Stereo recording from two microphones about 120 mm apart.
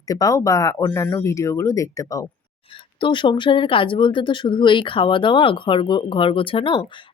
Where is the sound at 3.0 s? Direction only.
45° left (ahead or behind).